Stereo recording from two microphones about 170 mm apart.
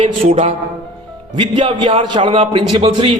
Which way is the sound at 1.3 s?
30° right (ahead or behind).